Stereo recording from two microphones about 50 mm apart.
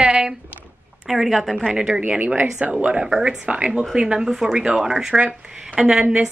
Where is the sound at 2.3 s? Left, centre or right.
Right.